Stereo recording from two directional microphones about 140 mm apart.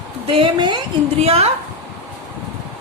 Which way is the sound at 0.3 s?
40° right (ahead or behind).